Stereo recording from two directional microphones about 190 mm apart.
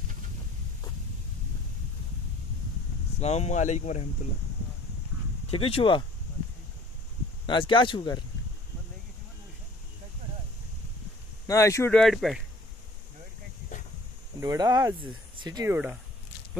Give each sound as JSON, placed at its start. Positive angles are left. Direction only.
{"t": 3.2, "sound": "speech", "side_deg": 35}
{"t": 5.5, "sound": "speech", "side_deg": 30}
{"t": 7.4, "sound": "speech", "side_deg": 25}
{"t": 11.4, "sound": "speech", "side_deg": 15}
{"t": 11.9, "sound": "speech", "side_deg": 0}
{"t": 14.4, "sound": "speech", "side_deg": -20}
{"t": 15.7, "sound": "speech", "side_deg": -5}